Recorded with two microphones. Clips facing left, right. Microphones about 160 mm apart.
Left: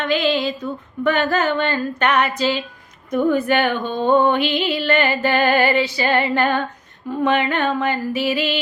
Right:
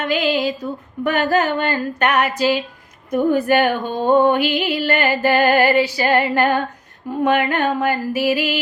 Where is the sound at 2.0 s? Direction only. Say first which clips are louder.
Right 1 dB; 10° right (ahead or behind).